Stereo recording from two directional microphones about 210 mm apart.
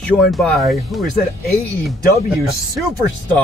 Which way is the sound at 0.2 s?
Centre (ahead or behind).